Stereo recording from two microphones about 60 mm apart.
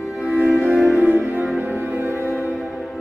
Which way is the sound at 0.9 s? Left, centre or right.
Right.